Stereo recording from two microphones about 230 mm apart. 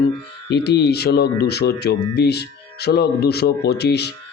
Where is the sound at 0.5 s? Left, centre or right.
Left.